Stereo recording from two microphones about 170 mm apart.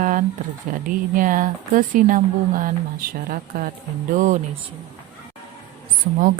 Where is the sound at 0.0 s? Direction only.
50° right (ahead or behind).